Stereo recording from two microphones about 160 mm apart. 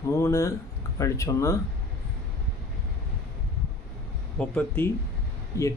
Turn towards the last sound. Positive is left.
turn(degrees=20)  # may be behind; listen again after turning